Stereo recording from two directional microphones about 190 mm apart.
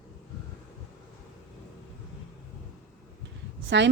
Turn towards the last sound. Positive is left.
turn(degrees=-70)  # may be behind; listen again after turning